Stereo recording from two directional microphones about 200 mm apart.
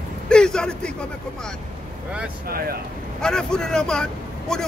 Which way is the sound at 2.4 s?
50° right (ahead or behind).